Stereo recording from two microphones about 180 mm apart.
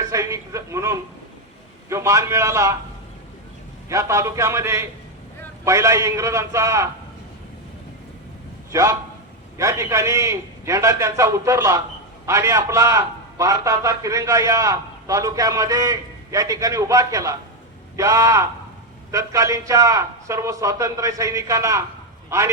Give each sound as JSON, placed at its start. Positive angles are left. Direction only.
{"t": 0.1, "sound": "a sound", "side_deg": -15}
{"t": 1.9, "sound": "a man's voice", "side_deg": -15}
{"t": 3.8, "sound": "a man's voice", "side_deg": -15}
{"t": 8.7, "sound": "a man's voice", "side_deg": -15}